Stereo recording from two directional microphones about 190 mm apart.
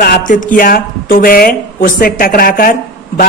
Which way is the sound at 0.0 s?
45° left (ahead or behind).